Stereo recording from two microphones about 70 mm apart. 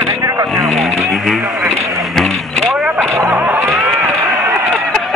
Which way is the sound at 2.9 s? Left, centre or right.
Right.